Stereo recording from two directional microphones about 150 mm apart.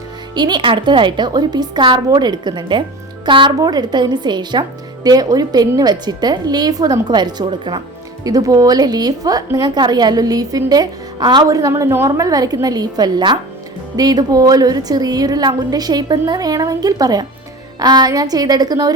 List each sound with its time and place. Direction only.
0.3 s a woman's voice: 30° right (ahead or behind)